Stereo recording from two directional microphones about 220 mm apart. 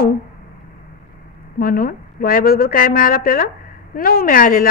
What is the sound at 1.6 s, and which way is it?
A woman's voice, 40° left (ahead or behind).